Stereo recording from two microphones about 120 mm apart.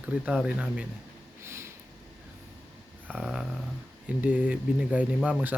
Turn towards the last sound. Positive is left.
turn(degrees=-10)  # may be behind; listen again after turning